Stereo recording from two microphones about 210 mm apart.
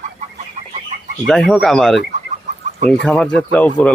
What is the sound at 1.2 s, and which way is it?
Speech, centre (ahead or behind).